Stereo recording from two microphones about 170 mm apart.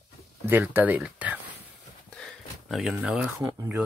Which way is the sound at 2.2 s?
Centre (ahead or behind).